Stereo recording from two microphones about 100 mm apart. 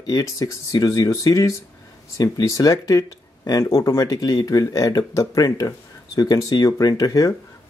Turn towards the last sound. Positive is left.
turn(degrees=40)  # may be behind; listen again after turning